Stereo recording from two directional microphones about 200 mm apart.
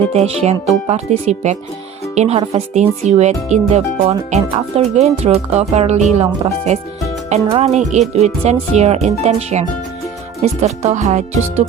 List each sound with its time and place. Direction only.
0.1 s speech: 30° right (ahead or behind)